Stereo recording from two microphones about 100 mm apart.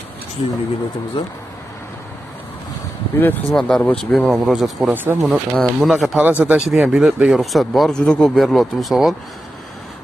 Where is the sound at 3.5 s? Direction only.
5° left (ahead or behind).